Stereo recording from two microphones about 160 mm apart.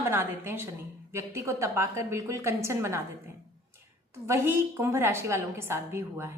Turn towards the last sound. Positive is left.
turn(degrees=-15)  # may be behind; listen again after turning